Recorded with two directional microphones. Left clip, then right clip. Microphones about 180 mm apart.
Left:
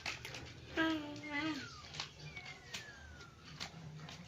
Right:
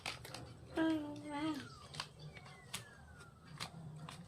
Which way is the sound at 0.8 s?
25° right (ahead or behind).